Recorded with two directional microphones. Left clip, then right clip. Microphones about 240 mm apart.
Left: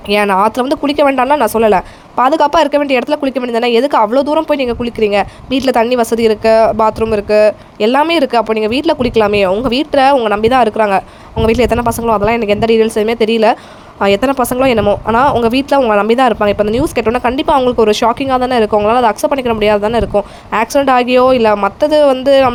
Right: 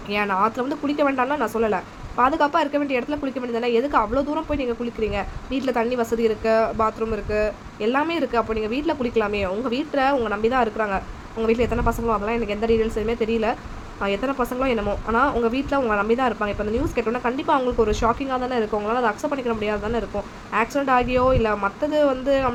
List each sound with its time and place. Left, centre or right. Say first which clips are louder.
0.1 s speech: left 11 dB; left